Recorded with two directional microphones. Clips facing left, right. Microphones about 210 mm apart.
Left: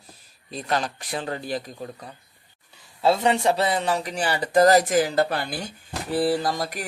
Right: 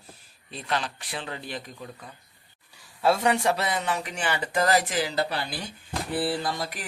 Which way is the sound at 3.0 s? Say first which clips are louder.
Left 3 dB; 25° left (ahead or behind).